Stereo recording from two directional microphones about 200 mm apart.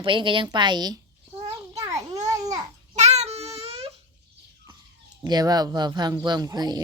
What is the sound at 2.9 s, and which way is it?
Child singing, 35° right (ahead or behind).